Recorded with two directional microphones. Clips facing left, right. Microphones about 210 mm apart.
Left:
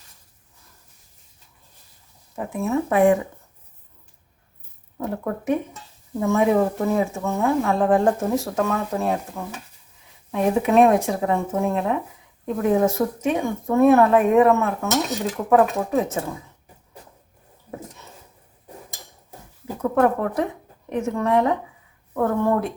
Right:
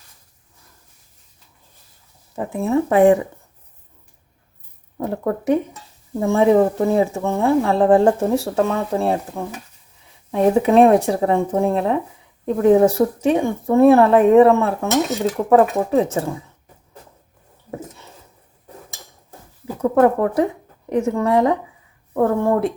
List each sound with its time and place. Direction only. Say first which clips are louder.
2.3 s speech: right 4 dB; 30° right (ahead or behind)
4.9 s speech: right 4 dB; 35° right (ahead or behind)
19.8 s speech: right 4 dB; 35° right (ahead or behind)